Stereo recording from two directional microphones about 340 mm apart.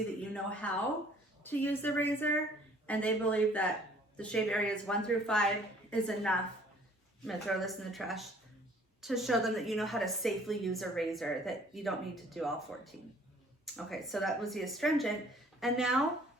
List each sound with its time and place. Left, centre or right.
0.6 s a woman's voice: centre